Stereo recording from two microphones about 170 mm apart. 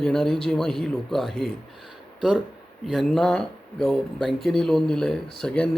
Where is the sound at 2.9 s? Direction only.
Centre (ahead or behind).